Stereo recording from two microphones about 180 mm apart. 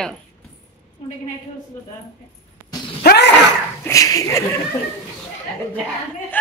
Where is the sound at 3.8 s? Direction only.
20° left (ahead or behind).